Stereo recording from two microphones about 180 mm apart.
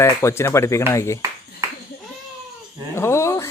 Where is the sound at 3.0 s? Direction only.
15° left (ahead or behind).